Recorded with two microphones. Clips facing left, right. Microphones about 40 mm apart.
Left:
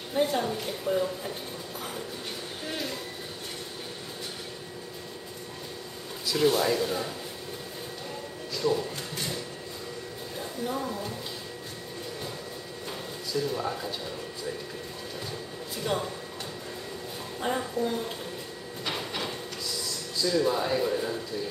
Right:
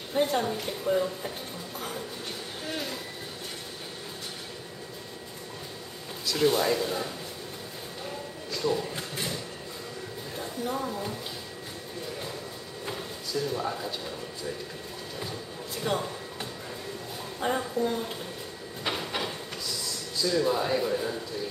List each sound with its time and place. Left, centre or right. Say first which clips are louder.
0.1 s speech: even; centre
6.2 s speech: even; centre
8.5 s music: left 1 dB; centre
8.9 s a sound: right 1 dB; centre
10.4 s speech: even; centre
12.9 s a sound: left 1 dB; centre
15.8 s speech: even; centre
17.4 s speech: right 1 dB; centre
18.9 s train: right 1 dB; centre
20.2 s speech: even; centre